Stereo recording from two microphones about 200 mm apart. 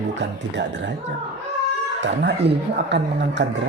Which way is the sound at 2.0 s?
65° right (ahead or behind).